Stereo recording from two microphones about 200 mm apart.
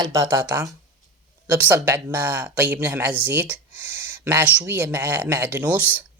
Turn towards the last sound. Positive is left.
turn(degrees=-10)  # may be behind; listen again after turning